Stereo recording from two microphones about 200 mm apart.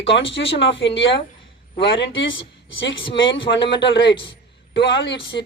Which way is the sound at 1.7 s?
65° left (ahead or behind).